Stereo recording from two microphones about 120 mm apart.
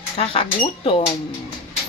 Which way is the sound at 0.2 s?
50° left (ahead or behind).